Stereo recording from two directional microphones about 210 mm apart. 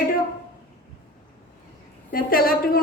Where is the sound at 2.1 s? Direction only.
45° left (ahead or behind).